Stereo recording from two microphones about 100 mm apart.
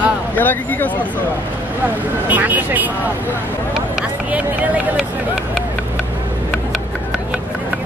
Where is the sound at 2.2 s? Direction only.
15° right (ahead or behind).